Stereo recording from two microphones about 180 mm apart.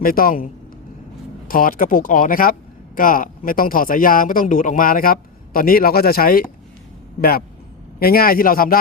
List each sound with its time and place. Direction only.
0.0 s speech: 55° left (ahead or behind)